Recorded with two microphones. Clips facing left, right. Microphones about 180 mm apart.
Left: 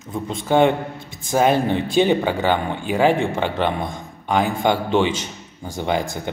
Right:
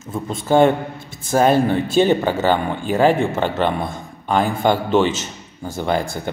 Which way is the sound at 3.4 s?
45° right (ahead or behind).